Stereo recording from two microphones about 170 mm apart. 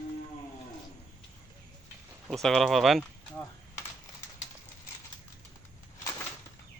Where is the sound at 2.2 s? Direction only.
Centre (ahead or behind).